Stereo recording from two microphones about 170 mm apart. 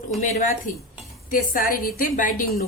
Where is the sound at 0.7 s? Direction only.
50° left (ahead or behind).